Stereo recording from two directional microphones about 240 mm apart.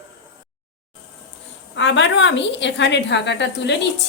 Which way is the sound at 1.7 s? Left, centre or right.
Left.